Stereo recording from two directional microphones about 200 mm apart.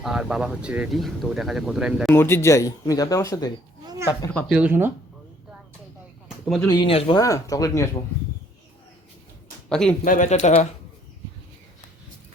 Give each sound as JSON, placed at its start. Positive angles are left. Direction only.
{"t": 0.0, "sound": "speech", "side_deg": 0}
{"t": 2.1, "sound": "speech", "side_deg": 10}
{"t": 4.5, "sound": "speech", "side_deg": -10}
{"t": 6.4, "sound": "speech", "side_deg": 10}
{"t": 6.7, "sound": "speech", "side_deg": 25}
{"t": 9.6, "sound": "a man's voice", "side_deg": 5}
{"t": 10.0, "sound": "speech", "side_deg": 40}